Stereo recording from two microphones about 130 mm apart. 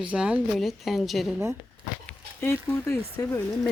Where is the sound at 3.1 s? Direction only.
25° left (ahead or behind).